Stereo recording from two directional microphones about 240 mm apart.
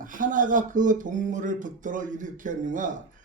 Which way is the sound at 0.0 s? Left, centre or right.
Right.